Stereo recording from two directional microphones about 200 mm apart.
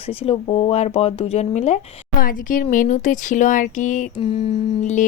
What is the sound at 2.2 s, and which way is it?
A woman's voice, 45° left (ahead or behind).